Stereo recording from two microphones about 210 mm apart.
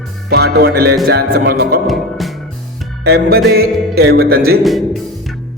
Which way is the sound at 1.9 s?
Centre (ahead or behind).